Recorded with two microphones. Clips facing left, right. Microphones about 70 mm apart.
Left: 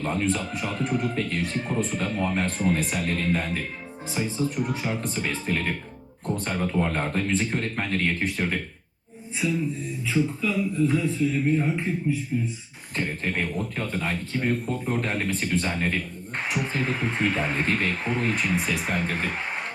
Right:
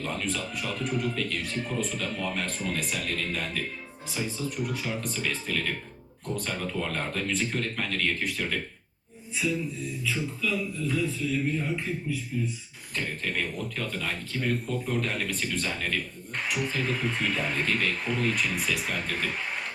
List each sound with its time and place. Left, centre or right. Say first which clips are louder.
0.0 s speech: left 6 dB; left
9.4 s music: left 3 dB; left
10.1 s speech: left 6 dB; left
12.3 s music: left 3 dB; left
13.0 s speech: left 4 dB; left